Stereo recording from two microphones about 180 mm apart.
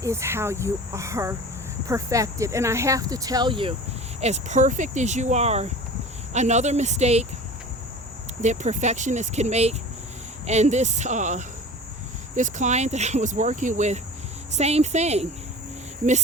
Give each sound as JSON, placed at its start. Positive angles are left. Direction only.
{"t": 0.0, "sound": "speech", "side_deg": -15}
{"t": 4.2, "sound": "speech", "side_deg": -40}
{"t": 8.4, "sound": "speech", "side_deg": -40}